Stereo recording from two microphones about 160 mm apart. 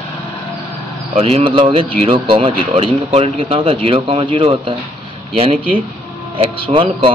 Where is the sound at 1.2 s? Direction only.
40° right (ahead or behind).